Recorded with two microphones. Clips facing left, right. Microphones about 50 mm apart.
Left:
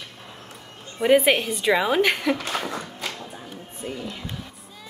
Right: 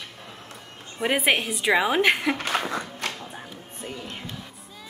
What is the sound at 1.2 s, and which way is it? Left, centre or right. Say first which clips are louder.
A woman's voice: left 2 dB; centre.